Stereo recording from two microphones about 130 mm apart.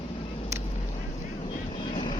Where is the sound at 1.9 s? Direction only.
35° left (ahead or behind).